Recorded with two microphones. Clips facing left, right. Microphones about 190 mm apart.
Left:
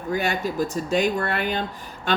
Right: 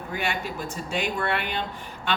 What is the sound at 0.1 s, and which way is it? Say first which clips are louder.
Speech: left 6 dB; 40° left (ahead or behind).